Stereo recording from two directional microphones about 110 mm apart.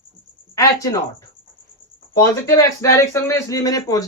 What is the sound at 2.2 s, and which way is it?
A man's voice, 30° left (ahead or behind).